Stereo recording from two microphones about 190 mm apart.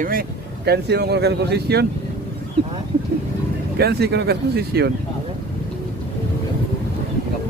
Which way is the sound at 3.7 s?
60° right (ahead or behind).